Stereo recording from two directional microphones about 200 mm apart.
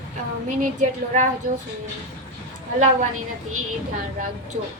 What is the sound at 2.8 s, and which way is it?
Speech, 40° right (ahead or behind).